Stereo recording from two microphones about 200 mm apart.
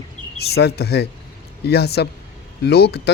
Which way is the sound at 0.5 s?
55° left (ahead or behind).